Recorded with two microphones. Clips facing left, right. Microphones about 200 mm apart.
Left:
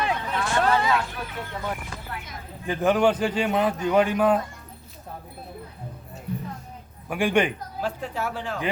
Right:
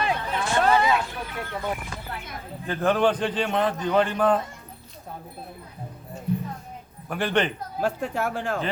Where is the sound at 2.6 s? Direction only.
15° left (ahead or behind).